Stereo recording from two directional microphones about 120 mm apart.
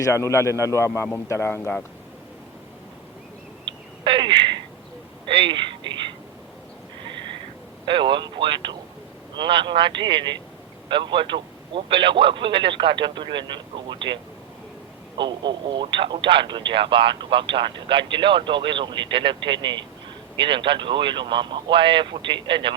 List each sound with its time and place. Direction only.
0.0 s a man's voice: 25° left (ahead or behind)
3.7 s a sound: 40° right (ahead or behind)
7.9 s speech: 40° right (ahead or behind)
15.2 s speech: 40° right (ahead or behind)